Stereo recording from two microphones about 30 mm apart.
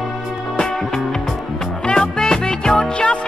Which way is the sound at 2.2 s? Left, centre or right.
Centre.